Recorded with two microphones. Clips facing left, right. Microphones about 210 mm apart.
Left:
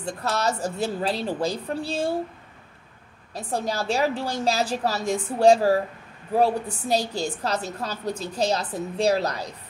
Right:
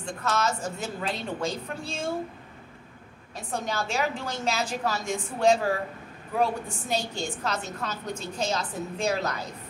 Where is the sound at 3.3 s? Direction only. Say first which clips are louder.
Left 4 dB; 35° left (ahead or behind).